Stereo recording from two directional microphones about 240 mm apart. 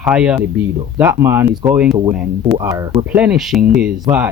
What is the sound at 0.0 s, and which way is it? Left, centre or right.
Speech, centre.